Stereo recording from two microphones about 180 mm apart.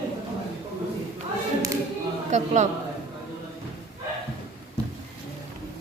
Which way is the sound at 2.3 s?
40° right (ahead or behind).